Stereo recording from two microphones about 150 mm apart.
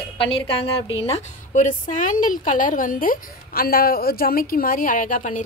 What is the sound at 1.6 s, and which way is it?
A woman's voice, 60° left (ahead or behind).